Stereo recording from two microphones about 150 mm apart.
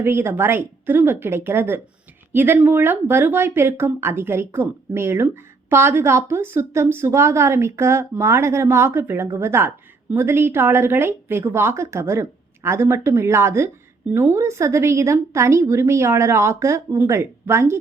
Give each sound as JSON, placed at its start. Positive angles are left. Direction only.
{"t": 0.0, "sound": "a woman's voice", "side_deg": -15}